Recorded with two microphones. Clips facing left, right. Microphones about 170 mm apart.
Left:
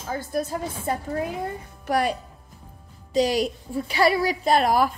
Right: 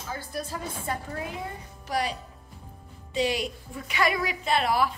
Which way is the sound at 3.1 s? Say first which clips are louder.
Left 6 dB; 40° left (ahead or behind).